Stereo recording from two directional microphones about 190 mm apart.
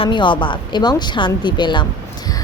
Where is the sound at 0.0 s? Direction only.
25° left (ahead or behind).